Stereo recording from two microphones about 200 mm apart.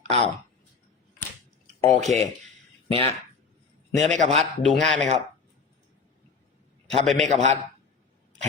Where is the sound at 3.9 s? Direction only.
35° right (ahead or behind).